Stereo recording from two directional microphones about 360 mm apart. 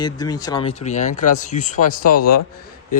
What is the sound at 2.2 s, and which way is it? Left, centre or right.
Speech, left.